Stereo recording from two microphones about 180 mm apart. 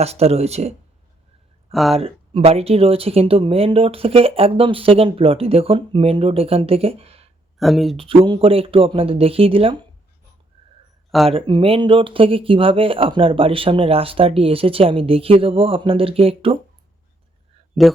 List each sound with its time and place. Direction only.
0.0 s speech: 35° right (ahead or behind)
1.7 s speech: centre (ahead or behind)
2.0 s speech: 35° right (ahead or behind)
7.6 s speech: centre (ahead or behind)
7.9 s speech: 30° right (ahead or behind)
11.3 s speech: 30° right (ahead or behind)
17.8 s speech: centre (ahead or behind)